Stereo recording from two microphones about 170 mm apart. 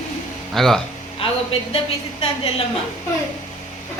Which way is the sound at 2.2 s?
35° left (ahead or behind).